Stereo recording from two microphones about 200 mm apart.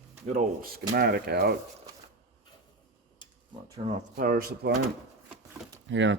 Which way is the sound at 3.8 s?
35° right (ahead or behind).